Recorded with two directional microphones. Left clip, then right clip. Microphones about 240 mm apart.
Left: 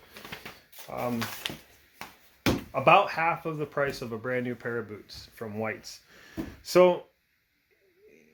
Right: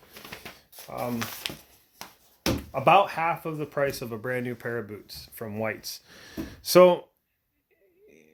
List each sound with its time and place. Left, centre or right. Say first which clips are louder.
0.9 s speech: even; right
2.7 s speech: right 1 dB; right